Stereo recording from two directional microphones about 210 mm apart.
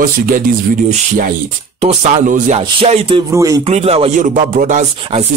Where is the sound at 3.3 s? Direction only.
15° right (ahead or behind).